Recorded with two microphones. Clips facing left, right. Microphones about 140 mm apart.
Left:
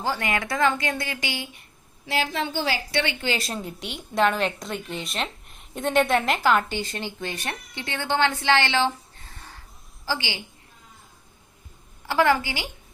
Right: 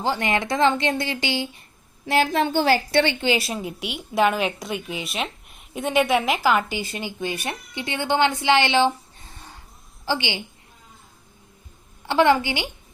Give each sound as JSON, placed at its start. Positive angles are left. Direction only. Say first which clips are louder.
{"t": 0.0, "sound": "speech", "louder": "right 3 dB", "side_deg": -25}
{"t": 2.0, "sound": "a woman's voice", "louder": "right 6 dB", "side_deg": -55}
{"t": 3.0, "sound": "speech", "louder": "right 6 dB", "side_deg": -30}
{"t": 3.2, "sound": "speech", "louder": "right 5 dB", "side_deg": -10}
{"t": 12.0, "sound": "speech", "louder": "right 3 dB", "side_deg": -20}